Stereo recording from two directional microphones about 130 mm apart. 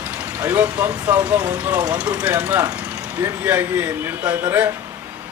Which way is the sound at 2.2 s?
15° right (ahead or behind).